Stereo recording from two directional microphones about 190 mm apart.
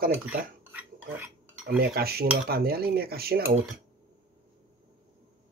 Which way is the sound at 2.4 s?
55° right (ahead or behind).